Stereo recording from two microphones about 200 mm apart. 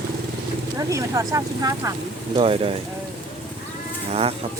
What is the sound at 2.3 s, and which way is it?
Speech, 30° right (ahead or behind).